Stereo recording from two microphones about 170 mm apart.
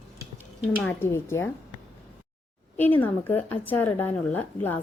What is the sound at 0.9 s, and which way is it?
Speech, 15° left (ahead or behind).